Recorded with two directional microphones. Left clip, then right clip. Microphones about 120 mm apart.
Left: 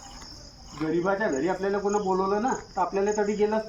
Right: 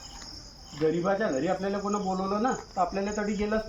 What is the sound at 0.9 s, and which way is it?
Speech, 5° right (ahead or behind).